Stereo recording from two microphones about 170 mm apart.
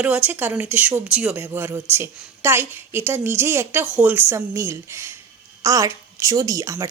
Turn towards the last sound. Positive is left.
turn(degrees=-20)  # may be behind; listen again after turning